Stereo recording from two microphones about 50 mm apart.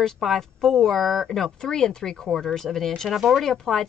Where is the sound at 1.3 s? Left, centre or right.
Centre.